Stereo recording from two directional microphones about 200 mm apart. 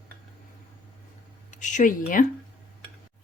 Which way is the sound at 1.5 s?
40° left (ahead or behind).